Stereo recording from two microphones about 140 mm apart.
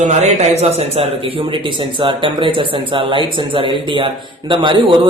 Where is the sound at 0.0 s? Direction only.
55° right (ahead or behind).